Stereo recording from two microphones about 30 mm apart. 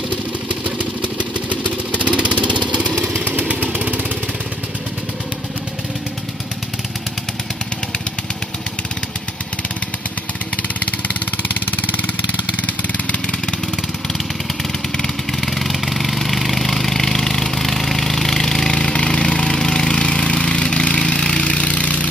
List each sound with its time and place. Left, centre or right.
0.5 s vehicle: right
2.0 s lawn mower: right
3.7 s vehicle: right
11.6 s vehicle: left
13.0 s vehicle: left
15.4 s vehicle: centre
19.1 s a sound: left
21.4 s engine: left